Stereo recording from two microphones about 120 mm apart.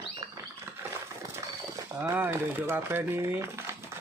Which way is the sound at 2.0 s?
20° right (ahead or behind).